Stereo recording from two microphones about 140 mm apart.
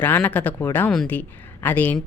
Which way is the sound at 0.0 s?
15° left (ahead or behind).